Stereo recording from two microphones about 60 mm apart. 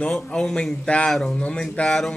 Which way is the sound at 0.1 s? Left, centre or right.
Centre.